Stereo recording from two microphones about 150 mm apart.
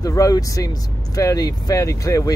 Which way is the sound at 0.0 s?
25° left (ahead or behind).